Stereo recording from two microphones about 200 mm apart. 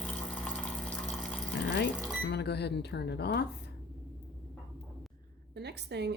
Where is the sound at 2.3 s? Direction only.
55° left (ahead or behind).